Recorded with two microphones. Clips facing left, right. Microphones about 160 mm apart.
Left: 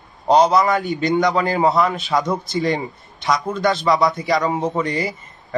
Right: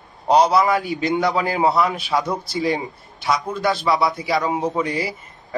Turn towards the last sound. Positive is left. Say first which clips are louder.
# left 3 dB
turn(degrees=-5)  # may be behind; listen again after turning